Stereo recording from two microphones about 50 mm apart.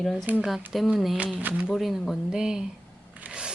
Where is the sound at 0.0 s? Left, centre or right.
Centre.